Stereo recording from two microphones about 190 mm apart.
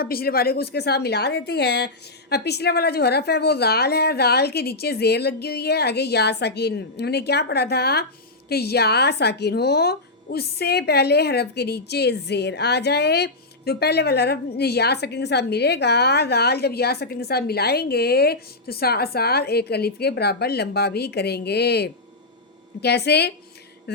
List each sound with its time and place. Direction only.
0.0 s speech: 50° left (ahead or behind)